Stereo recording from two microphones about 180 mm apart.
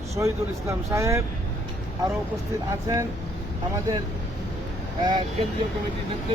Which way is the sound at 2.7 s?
15° right (ahead or behind).